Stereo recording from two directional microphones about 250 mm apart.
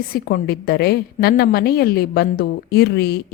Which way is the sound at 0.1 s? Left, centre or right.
Left.